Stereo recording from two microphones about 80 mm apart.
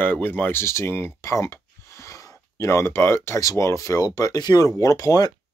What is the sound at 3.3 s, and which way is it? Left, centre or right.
Speech, left.